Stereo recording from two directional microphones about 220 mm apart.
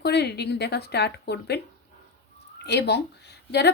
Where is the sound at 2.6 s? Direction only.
50° left (ahead or behind).